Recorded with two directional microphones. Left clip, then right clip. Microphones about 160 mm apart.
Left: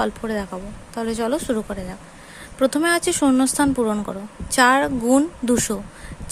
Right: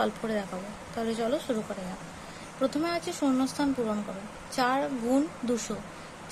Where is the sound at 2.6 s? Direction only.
50° left (ahead or behind).